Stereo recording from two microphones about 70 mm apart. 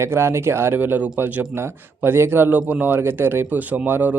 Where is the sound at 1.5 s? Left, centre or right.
Right.